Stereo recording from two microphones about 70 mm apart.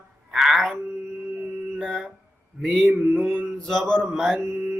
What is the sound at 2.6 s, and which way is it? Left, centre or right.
Mantra, centre.